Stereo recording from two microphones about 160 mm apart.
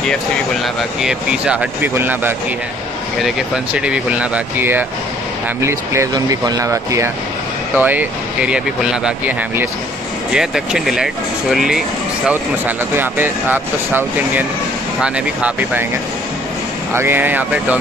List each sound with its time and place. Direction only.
1.0 s speech: 5° right (ahead or behind)
10.3 s speech: 5° right (ahead or behind)
16.9 s speech: 15° right (ahead or behind)